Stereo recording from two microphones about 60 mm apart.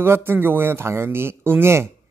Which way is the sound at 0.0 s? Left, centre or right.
Right.